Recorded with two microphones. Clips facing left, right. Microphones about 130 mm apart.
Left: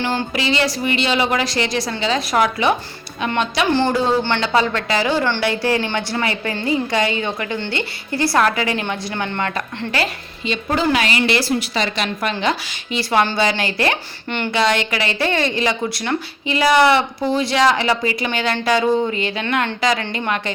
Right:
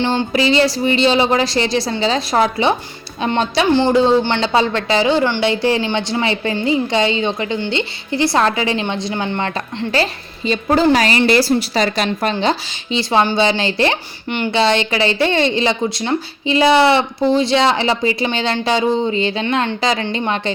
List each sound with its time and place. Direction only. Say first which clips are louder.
0.0 s speech: right 5 dB; 25° right (ahead or behind)
3.8 s speech: right 6 dB; 20° right (ahead or behind)
9.9 s speech: right 4 dB; 35° right (ahead or behind); by 14.5 s 15° right (ahead or behind)
14.5 s speech: right 3 dB; 30° right (ahead or behind)